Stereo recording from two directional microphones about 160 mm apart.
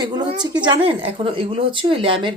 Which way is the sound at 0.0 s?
30° right (ahead or behind).